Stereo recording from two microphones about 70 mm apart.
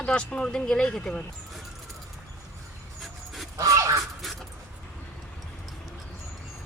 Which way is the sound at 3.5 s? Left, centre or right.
Right.